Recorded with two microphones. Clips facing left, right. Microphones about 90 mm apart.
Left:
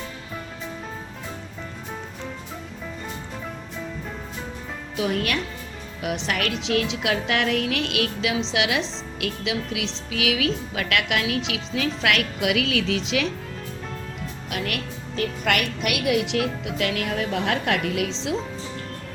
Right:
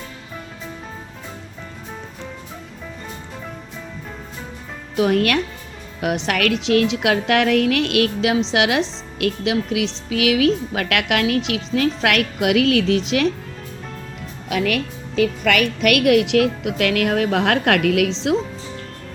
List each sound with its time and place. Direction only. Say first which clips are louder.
4.9 s a woman's voice: right 7 dB; 55° right (ahead or behind)
15.8 s a woman's voice: right 8 dB; 85° right
16.3 s a woman's voice: right 7 dB; 60° right (ahead or behind)